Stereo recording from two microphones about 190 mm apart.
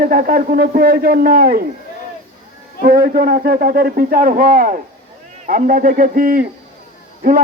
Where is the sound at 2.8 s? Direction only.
50° right (ahead or behind).